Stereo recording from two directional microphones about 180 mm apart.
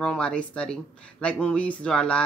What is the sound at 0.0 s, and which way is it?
A woman's voice, 5° left (ahead or behind).